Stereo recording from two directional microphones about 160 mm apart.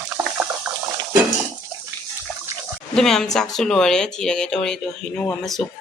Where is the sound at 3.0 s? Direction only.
5° left (ahead or behind).